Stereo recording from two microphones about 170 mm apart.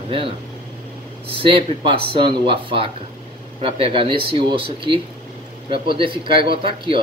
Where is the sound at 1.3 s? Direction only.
30° right (ahead or behind).